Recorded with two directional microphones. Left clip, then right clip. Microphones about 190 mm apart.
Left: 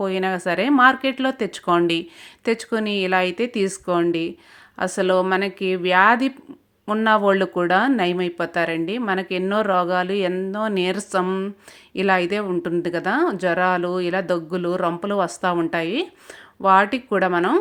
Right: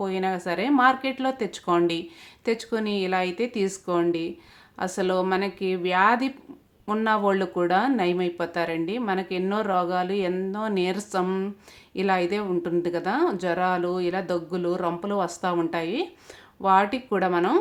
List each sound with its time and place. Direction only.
0.0 s speech: 30° left (ahead or behind)